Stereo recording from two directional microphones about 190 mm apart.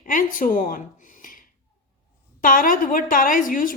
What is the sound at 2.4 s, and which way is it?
Speech, 45° left (ahead or behind).